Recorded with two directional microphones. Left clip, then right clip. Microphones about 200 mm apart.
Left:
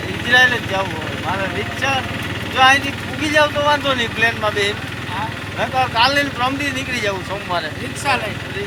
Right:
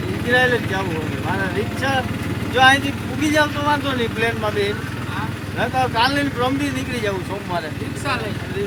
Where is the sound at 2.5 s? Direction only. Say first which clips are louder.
Left 1 dB; 25° right (ahead or behind).